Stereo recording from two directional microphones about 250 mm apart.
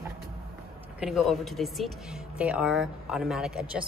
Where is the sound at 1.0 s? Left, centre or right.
Centre.